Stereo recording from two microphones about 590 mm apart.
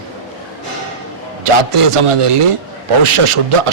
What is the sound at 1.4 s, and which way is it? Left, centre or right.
A man's voice, right.